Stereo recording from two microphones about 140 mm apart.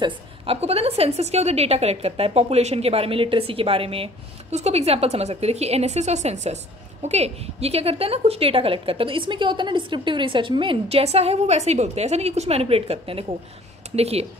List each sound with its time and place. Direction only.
0.0 s a woman's voice: 45° right (ahead or behind)